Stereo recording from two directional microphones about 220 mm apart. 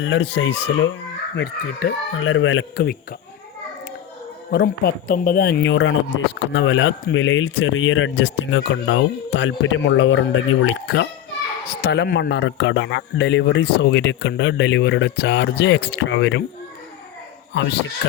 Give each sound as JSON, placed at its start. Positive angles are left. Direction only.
{"t": 0.0, "sound": "speech", "side_deg": 55}
{"t": 4.5, "sound": "speech", "side_deg": 45}
{"t": 17.5, "sound": "speech", "side_deg": 55}